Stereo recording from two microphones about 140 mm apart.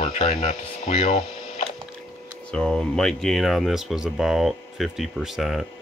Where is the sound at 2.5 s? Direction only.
5° left (ahead or behind).